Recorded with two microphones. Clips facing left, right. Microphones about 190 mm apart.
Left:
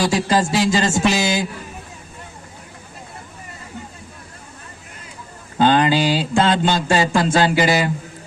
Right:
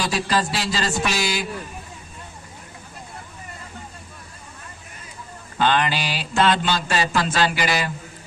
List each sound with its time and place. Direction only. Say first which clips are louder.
0.1 s speech: left 5 dB; 20° left (ahead or behind)
5.5 s mantra: left 6 dB; 25° left (ahead or behind)
6.7 s speech: left 5 dB; 25° left (ahead or behind)